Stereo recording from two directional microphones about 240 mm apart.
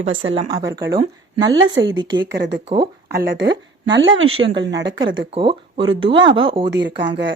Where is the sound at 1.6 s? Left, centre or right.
Right.